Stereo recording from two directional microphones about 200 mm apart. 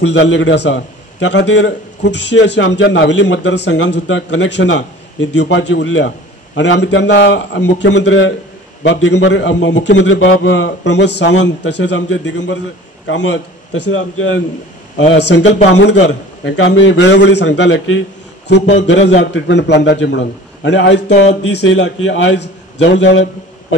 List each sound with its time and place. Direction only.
0.0 s a man's voice: 65° left (ahead or behind)